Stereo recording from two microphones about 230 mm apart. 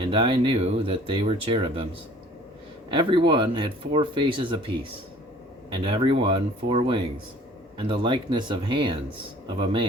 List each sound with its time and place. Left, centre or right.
0.0 s speech: right